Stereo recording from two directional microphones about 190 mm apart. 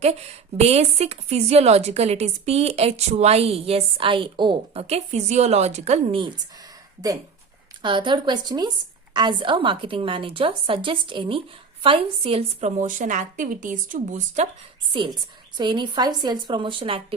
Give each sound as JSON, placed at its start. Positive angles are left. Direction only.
{"t": 0.0, "sound": "speech", "side_deg": -35}
{"t": 7.8, "sound": "a woman's voice", "side_deg": -25}
{"t": 14.9, "sound": "a woman's voice", "side_deg": -25}